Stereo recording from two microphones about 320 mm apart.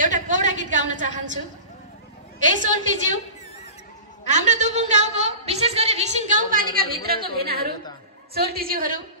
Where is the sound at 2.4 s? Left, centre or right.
Right.